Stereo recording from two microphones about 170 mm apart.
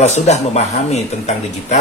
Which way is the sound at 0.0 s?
40° left (ahead or behind).